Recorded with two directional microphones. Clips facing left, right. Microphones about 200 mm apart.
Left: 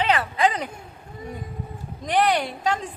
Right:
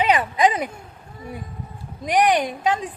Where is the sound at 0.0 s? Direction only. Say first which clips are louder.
Right 3 dB; 15° right (ahead or behind).